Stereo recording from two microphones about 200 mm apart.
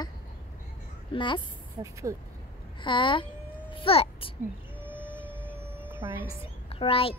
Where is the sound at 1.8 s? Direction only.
15° right (ahead or behind).